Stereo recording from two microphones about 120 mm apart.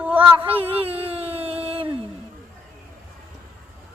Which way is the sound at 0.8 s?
55° right (ahead or behind).